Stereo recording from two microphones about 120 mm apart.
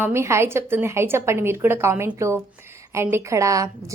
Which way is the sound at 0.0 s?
20° right (ahead or behind).